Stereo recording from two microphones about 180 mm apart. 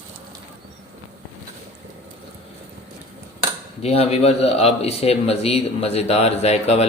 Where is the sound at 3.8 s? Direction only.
35° left (ahead or behind).